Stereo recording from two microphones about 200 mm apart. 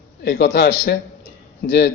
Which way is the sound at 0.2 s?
55° left (ahead or behind).